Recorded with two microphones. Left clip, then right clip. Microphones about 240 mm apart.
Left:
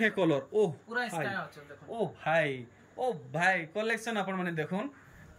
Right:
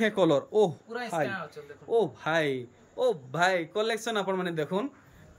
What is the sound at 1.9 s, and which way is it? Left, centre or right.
A man's voice, centre.